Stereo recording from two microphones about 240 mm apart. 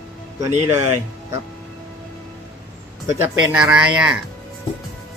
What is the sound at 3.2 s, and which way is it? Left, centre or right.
Speech, centre.